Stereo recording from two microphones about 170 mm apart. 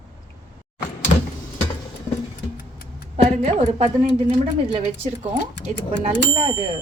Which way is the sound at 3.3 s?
40° right (ahead or behind).